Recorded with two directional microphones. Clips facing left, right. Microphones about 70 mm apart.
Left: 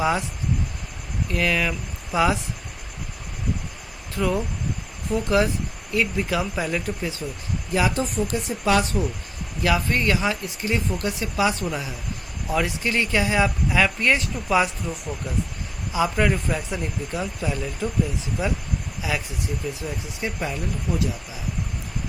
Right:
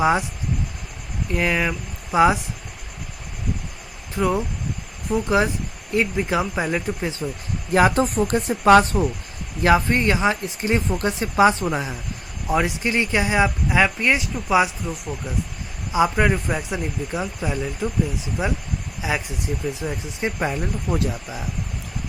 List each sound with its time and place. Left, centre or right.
0.0 s speech: right
1.3 s speech: right
4.1 s speech: centre
7.7 s speech: right; by 15.1 s centre
15.9 s speech: right
19.0 s speech: right